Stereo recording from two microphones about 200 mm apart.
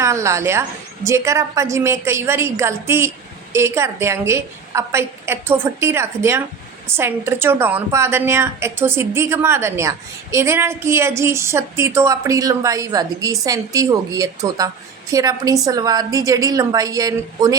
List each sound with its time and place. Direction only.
0.0 s a woman's voice: 15° right (ahead or behind)